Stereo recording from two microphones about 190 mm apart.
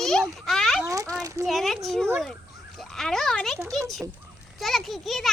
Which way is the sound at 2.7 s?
Centre (ahead or behind).